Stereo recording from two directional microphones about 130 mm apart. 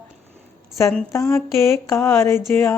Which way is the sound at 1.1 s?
20° left (ahead or behind).